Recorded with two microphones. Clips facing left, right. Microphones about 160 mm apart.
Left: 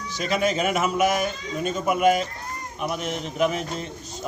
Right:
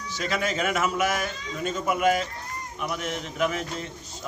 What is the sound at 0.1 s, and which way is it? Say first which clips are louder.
A man's voice: left 4 dB; 20° left (ahead or behind).